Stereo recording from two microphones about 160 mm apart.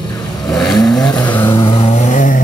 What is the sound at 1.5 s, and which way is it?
Vehicle, 30° left (ahead or behind).